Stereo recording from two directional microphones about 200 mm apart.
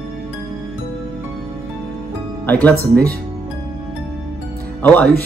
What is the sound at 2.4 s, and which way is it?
Speech, 10° left (ahead or behind).